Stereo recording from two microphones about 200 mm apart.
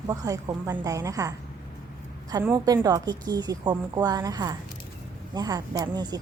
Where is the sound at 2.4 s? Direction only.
15° right (ahead or behind).